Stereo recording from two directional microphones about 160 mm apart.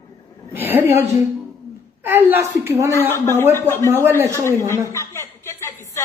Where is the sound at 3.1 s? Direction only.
15° left (ahead or behind).